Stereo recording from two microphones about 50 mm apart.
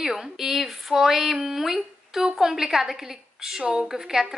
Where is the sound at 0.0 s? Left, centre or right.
Centre.